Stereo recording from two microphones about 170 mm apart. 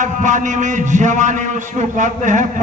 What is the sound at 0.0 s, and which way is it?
A man's voice, 45° right (ahead or behind).